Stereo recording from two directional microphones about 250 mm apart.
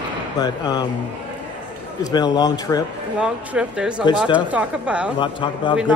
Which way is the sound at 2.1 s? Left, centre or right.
Centre.